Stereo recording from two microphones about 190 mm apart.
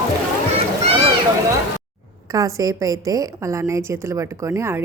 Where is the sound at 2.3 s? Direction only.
15° right (ahead or behind).